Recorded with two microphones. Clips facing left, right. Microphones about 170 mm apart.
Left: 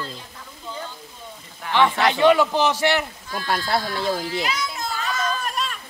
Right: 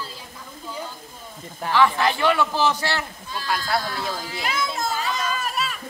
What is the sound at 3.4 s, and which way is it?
Speech, 40° left (ahead or behind).